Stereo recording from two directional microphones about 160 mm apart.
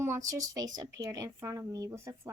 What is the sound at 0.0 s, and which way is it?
Speech, 20° right (ahead or behind).